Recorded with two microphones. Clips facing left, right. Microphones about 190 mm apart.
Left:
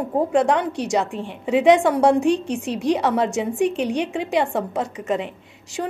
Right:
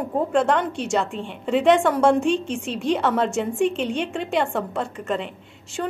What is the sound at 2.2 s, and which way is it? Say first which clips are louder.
Speech: left 2 dB; 65° left (ahead or behind).